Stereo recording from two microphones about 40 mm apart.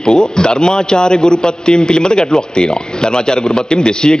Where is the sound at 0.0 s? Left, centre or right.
Centre.